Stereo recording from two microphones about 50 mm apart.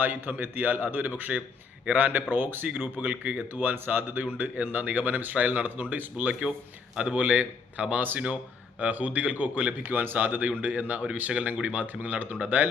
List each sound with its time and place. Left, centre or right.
0.0 s speech: right
3.0 s speech: right
3.5 s speech: right
7.0 s speech: right